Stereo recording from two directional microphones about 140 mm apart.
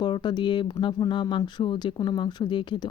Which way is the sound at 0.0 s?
30° left (ahead or behind).